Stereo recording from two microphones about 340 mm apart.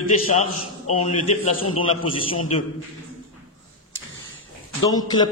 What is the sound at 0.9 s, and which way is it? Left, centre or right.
Speech, centre.